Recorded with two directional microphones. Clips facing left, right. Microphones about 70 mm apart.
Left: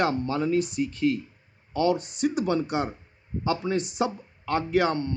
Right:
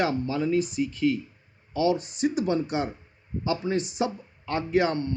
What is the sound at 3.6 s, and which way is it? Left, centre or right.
Speech, left.